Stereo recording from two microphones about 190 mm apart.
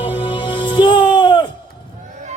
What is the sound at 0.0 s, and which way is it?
Music, 25° left (ahead or behind).